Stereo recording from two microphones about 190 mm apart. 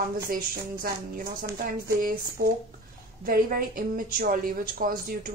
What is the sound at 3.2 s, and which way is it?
Speech, 50° right (ahead or behind).